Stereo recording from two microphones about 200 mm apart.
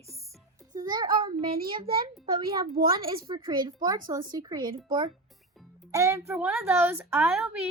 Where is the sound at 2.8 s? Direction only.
45° right (ahead or behind).